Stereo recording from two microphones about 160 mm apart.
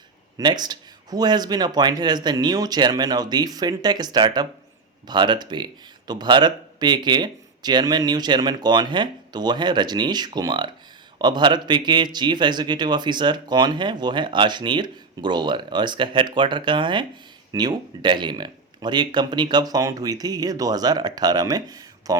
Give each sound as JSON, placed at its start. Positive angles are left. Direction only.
{"t": 0.3, "sound": "speech", "side_deg": -25}